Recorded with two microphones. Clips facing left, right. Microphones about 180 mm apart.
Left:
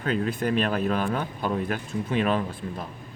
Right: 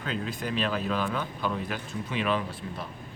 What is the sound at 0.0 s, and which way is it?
Speech, 50° left (ahead or behind).